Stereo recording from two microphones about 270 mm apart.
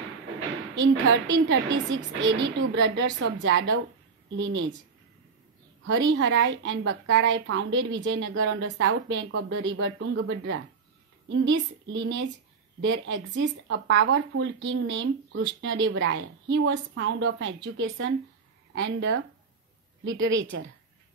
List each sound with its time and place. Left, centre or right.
1.4 s speech: right
5.9 s speech: right